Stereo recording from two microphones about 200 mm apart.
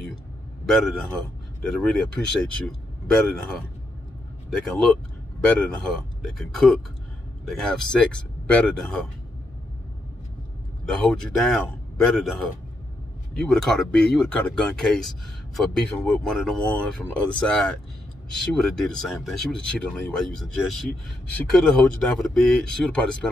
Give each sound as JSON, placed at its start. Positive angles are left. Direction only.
{"t": 0.7, "sound": "speech", "side_deg": 0}
{"t": 10.9, "sound": "speech", "side_deg": 5}
{"t": 13.3, "sound": "speech", "side_deg": 5}